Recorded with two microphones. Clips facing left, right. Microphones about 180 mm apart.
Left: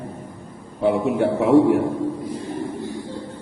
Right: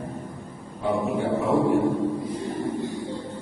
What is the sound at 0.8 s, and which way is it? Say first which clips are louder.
Speech: left 6 dB; 75° left (ahead or behind).